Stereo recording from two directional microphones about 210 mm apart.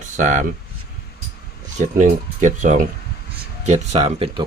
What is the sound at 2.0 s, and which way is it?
Speech, 35° right (ahead or behind).